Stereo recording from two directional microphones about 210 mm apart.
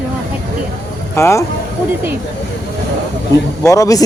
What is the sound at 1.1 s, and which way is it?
Speech, 15° left (ahead or behind).